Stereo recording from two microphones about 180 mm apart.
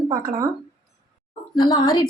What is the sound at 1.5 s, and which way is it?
Speech, 20° left (ahead or behind).